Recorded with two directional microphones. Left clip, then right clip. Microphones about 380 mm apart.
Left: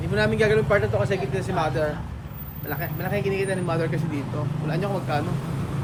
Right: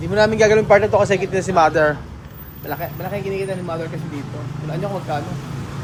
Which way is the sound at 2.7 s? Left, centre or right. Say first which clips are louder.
Right 3 dB; centre.